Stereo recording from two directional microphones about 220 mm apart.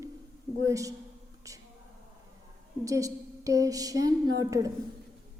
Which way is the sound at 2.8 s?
15° right (ahead or behind).